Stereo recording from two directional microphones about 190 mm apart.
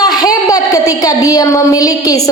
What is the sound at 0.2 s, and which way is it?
A woman's voice, 20° left (ahead or behind).